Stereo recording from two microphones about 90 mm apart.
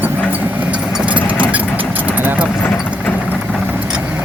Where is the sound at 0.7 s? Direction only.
15° right (ahead or behind).